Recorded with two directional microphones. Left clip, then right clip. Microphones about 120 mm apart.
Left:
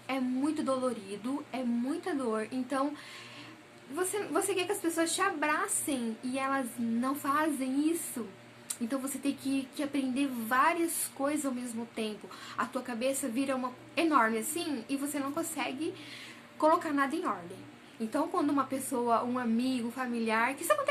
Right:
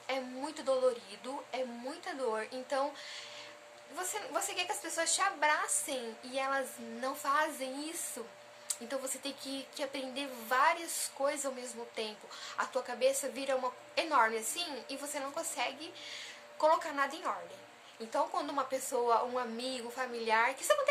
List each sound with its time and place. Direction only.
0.1 s a woman's voice: 25° right (ahead or behind)
3.9 s a woman's voice: 20° right (ahead or behind)
9.7 s a woman's voice: 30° right (ahead or behind)